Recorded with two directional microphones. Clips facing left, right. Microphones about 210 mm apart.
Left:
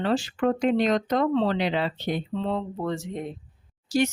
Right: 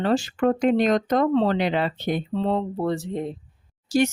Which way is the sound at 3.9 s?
45° right (ahead or behind).